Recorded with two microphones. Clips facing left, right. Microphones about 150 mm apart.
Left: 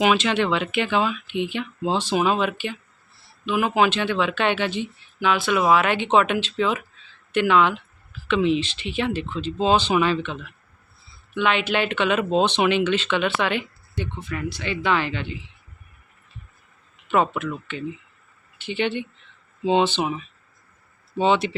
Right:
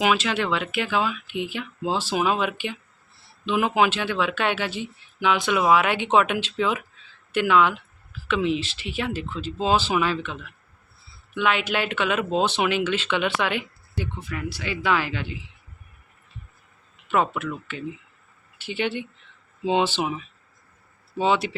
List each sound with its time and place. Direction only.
0.0 s speech: 5° right (ahead or behind)
3.4 s speech: 25° right (ahead or behind)
3.8 s speech: 10° right (ahead or behind)
17.1 s speech: 5° right (ahead or behind)